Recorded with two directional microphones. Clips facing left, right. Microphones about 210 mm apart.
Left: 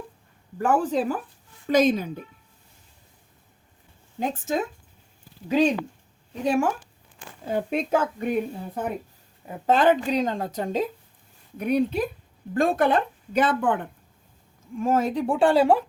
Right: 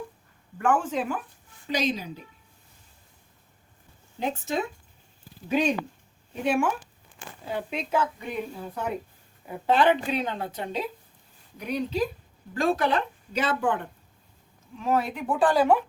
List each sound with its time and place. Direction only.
0.6 s speech: 35° left (ahead or behind)
1.6 s speech: 50° left (ahead or behind)
4.2 s speech: 45° left (ahead or behind)
6.4 s speech: 40° left (ahead or behind)
11.5 s speech: 55° left (ahead or behind)
14.8 s speech: 45° left (ahead or behind)
15.3 s speech: 25° left (ahead or behind)